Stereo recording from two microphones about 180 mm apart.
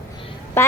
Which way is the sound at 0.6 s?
15° left (ahead or behind).